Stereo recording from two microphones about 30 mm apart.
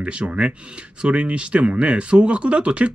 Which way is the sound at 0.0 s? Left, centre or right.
Right.